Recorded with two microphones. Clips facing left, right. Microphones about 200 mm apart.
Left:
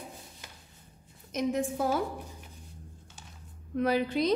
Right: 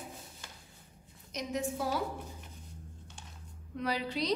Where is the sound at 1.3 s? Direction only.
50° left (ahead or behind).